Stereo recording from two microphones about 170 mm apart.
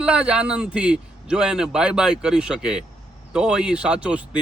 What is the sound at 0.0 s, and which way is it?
Speech, 5° right (ahead or behind).